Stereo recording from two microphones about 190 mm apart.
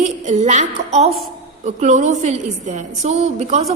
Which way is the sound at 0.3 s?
40° right (ahead or behind).